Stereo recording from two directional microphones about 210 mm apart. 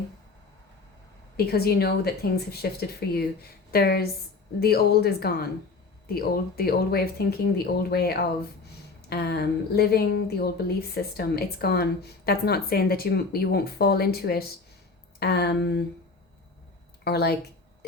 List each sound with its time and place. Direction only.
1.5 s a woman's voice: 50° left (ahead or behind)
17.0 s speech: 50° left (ahead or behind)